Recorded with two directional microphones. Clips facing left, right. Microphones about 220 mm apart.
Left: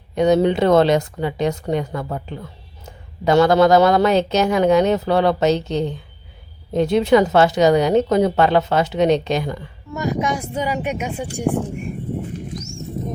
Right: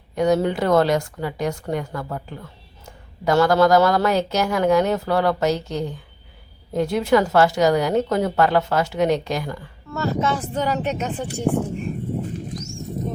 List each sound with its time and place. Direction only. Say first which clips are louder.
0.2 s a woman's voice: left 4 dB; 20° left (ahead or behind)